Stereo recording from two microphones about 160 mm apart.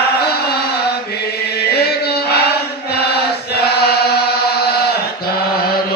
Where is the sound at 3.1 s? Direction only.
90° left.